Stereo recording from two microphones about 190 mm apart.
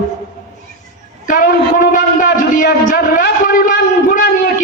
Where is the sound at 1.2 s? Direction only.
50° left (ahead or behind).